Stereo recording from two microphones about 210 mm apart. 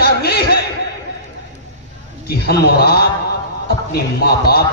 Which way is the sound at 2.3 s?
50° left (ahead or behind).